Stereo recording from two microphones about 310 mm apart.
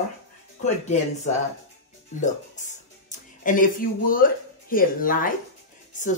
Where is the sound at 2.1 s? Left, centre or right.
Left.